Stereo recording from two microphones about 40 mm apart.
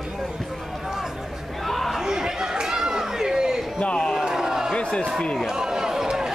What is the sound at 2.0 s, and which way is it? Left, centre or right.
Chatter, centre.